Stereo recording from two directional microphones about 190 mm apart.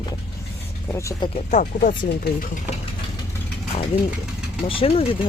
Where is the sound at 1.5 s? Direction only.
45° left (ahead or behind).